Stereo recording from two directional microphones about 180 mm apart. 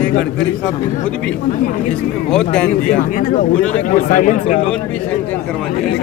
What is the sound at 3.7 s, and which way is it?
Speech, 45° left (ahead or behind).